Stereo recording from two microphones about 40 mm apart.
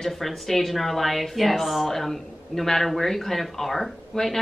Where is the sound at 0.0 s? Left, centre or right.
Centre.